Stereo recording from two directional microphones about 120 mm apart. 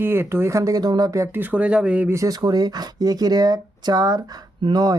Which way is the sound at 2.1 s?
25° right (ahead or behind).